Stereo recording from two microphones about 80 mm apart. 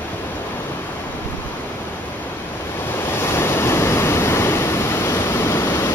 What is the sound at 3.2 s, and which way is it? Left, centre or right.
Waves, left.